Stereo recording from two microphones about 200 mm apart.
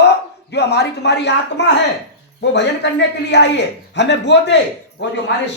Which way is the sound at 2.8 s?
60° left (ahead or behind).